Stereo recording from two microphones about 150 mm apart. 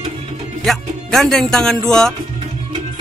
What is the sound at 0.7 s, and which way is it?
Speech, centre (ahead or behind).